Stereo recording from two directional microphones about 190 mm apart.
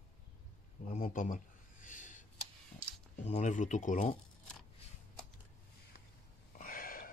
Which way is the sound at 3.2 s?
40° left (ahead or behind).